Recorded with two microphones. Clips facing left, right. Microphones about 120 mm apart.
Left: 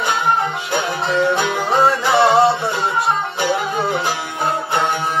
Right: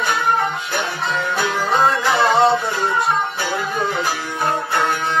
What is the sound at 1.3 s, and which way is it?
Music, 25° left (ahead or behind).